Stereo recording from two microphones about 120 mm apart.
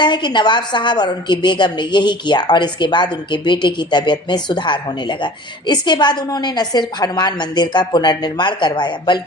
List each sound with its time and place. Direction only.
0.0 s a woman's voice: 40° left (ahead or behind)